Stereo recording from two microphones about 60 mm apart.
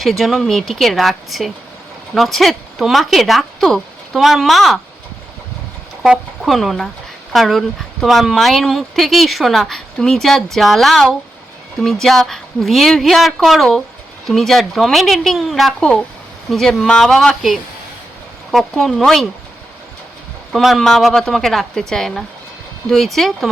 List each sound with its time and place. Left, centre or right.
0.0 s speech: centre
6.4 s speech: centre
18.8 s speech: centre
20.5 s speech: centre